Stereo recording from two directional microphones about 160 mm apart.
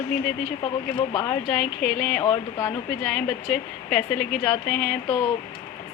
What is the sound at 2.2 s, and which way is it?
Speech, 20° left (ahead or behind).